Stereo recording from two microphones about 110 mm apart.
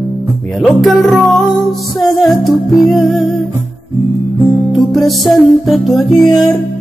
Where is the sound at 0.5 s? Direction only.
Centre (ahead or behind).